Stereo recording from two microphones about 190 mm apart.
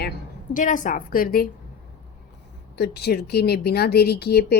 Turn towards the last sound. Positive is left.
turn(degrees=55)  # may be behind; listen again after turning